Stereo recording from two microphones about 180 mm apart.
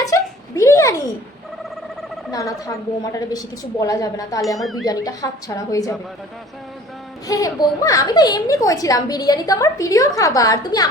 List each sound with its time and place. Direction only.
0.0 s a sound: 15° left (ahead or behind)
2.3 s a woman's voice: 20° left (ahead or behind)
4.5 s speech: centre (ahead or behind)
4.9 s a woman's voice: 20° left (ahead or behind)
7.3 s a woman's voice: 20° left (ahead or behind)